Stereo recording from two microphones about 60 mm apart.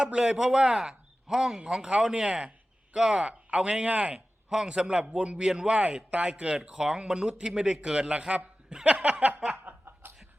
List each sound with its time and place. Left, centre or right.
0.0 s speech: centre
8.7 s chuckle: centre
9.6 s chuckle: right